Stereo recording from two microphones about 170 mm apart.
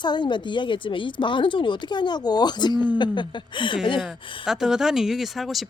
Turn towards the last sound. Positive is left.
turn(degrees=0)  # may be behind; listen again after turning